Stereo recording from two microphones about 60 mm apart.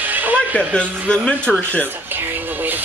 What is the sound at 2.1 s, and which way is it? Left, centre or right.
Speech, right.